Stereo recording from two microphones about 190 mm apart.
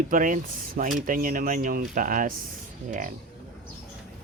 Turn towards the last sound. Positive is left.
turn(degrees=-45)  # may be behind; listen again after turning